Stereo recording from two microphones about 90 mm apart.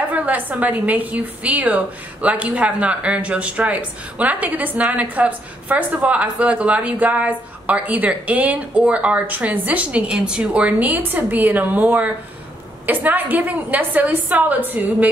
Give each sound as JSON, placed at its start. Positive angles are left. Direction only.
{"t": 0.1, "sound": "a woman's voice", "side_deg": -20}